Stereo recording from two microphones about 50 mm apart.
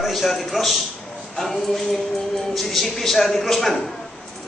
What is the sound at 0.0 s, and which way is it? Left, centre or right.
Speech, centre.